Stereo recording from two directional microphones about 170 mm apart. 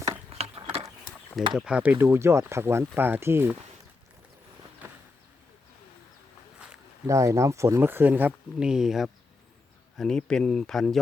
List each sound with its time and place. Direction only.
0.0 s a sound: 35° right (ahead or behind)
1.5 s speech: 5° right (ahead or behind)
7.1 s speech: 20° right (ahead or behind); by 10.9 s centre (ahead or behind)